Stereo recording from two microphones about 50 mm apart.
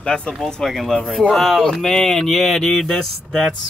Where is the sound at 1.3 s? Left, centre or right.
Centre.